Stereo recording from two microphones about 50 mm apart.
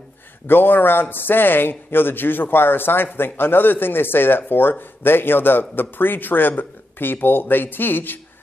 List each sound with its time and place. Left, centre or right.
0.5 s a man's voice: left